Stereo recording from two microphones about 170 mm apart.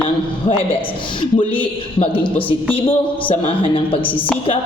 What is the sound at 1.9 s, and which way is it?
A man's voice, 30° left (ahead or behind).